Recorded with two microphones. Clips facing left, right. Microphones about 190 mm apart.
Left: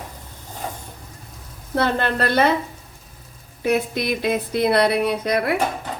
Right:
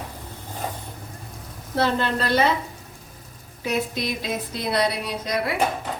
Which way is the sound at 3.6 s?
55° left (ahead or behind).